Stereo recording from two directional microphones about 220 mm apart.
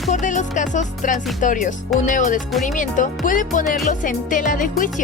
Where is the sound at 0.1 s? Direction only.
35° left (ahead or behind).